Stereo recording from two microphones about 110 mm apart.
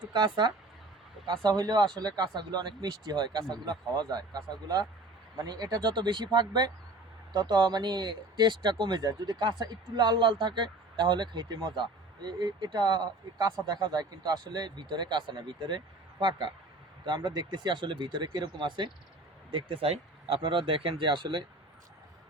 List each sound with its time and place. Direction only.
0.1 s speech: 45° right (ahead or behind)
17.1 s speech: 40° right (ahead or behind)